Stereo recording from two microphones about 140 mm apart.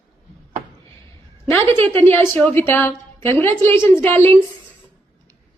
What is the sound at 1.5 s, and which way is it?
Speech, 15° left (ahead or behind).